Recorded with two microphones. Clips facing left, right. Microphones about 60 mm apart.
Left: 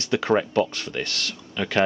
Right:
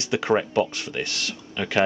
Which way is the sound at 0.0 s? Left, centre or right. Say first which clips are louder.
Left 1 dB; centre.